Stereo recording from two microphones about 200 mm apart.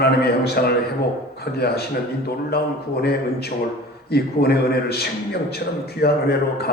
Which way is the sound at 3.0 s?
55° left (ahead or behind).